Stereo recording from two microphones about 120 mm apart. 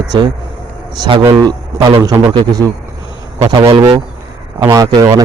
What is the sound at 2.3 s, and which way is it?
A man's voice, 35° right (ahead or behind).